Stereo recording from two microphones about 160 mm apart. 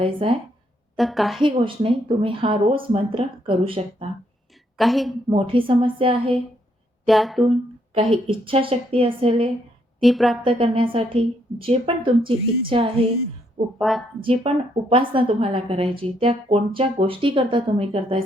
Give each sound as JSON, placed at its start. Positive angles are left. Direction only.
{"t": 0.0, "sound": "a woman's voice", "side_deg": -35}
{"t": 0.9, "sound": "a woman's voice", "side_deg": 0}
{"t": 1.4, "sound": "a woman's voice", "side_deg": -30}
{"t": 4.8, "sound": "a woman's voice", "side_deg": 0}
{"t": 5.3, "sound": "a woman's voice", "side_deg": -35}
{"t": 7.1, "sound": "a woman's voice", "side_deg": 0}
{"t": 7.9, "sound": "a woman's voice", "side_deg": -35}
{"t": 10.0, "sound": "a woman's voice", "side_deg": 0}
{"t": 10.4, "sound": "a woman's voice", "side_deg": -35}
{"t": 13.7, "sound": "a woman's voice", "side_deg": 0}
{"t": 14.2, "sound": "a woman's voice", "side_deg": -35}